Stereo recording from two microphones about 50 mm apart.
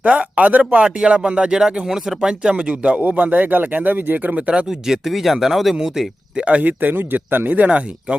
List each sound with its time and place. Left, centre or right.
0.0 s speech: right; by 2.3 s centre
2.4 s speech: right
4.4 s speech: right
4.9 s speech: centre
5.7 s speech: centre
6.4 s speech: right